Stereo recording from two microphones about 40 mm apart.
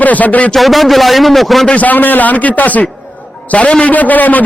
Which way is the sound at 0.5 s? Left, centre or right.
Centre.